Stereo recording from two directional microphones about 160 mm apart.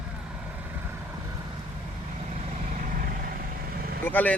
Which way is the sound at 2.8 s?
60° right (ahead or behind).